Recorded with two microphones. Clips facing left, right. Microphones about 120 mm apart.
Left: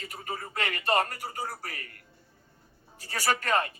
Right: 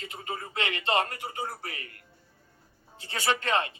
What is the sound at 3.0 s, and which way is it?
Speech, 25° right (ahead or behind).